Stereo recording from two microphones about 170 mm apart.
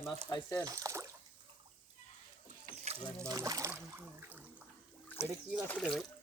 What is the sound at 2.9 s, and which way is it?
Music, 40° right (ahead or behind).